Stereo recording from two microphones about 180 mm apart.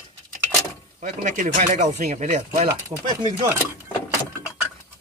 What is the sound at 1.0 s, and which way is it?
Speech, 45° right (ahead or behind).